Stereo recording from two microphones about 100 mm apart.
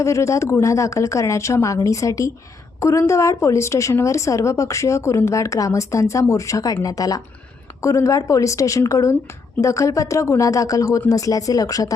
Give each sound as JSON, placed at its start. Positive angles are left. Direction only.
{"t": 0.0, "sound": "a woman's voice", "side_deg": 30}